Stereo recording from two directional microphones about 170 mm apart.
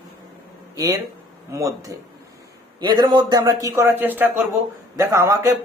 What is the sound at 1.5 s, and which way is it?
Speech, 20° right (ahead or behind).